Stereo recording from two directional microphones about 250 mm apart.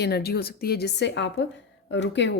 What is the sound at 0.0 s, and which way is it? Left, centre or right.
A woman's voice, left.